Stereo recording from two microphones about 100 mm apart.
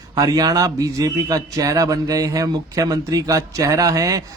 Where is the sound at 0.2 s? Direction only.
40° right (ahead or behind).